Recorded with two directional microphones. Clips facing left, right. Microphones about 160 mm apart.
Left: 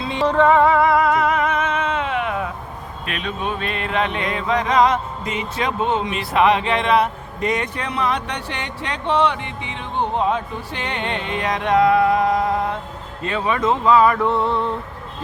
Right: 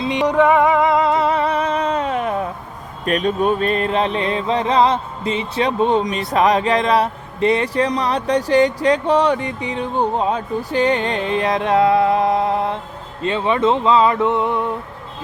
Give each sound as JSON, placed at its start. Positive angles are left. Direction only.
{"t": 0.0, "sound": "music", "side_deg": -15}
{"t": 13.2, "sound": "speech", "side_deg": -25}